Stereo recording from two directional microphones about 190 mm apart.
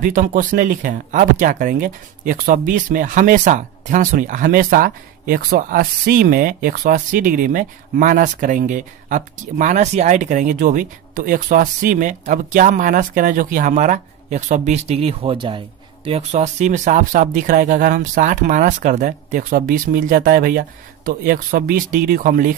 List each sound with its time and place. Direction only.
0.0 s speech: 45° right (ahead or behind)